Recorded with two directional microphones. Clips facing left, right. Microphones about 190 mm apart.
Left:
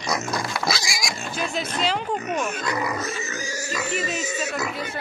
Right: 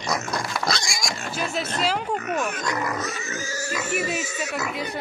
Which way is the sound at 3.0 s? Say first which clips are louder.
Left 1 dB; 25° left (ahead or behind).